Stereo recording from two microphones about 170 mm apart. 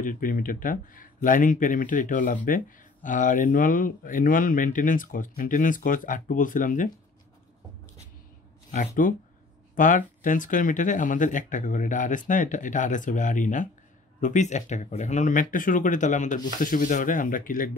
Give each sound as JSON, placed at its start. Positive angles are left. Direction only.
{"t": 0.0, "sound": "speech", "side_deg": 55}
{"t": 8.7, "sound": "speech", "side_deg": 50}